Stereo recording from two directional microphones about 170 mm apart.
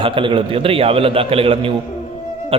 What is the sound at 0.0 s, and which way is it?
A man's voice, 30° right (ahead or behind).